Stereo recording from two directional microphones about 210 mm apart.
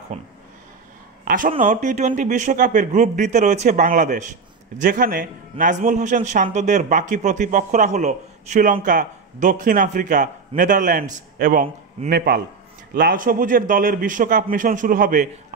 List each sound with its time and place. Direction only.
0.1 s a man's voice: 30° right (ahead or behind)
1.2 s a sound: 40° right (ahead or behind)
1.5 s a man's voice: 35° right (ahead or behind)